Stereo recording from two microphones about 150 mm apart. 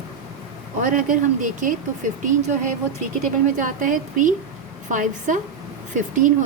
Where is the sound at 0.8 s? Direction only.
60° right (ahead or behind).